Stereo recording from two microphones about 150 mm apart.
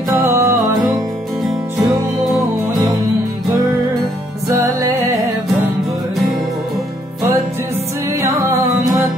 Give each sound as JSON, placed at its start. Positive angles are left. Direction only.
{"t": 0.3, "sound": "music", "side_deg": -20}
{"t": 4.5, "sound": "music", "side_deg": -15}
{"t": 8.1, "sound": "music", "side_deg": -20}